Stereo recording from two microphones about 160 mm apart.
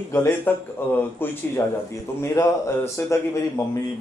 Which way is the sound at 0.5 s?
10° left (ahead or behind).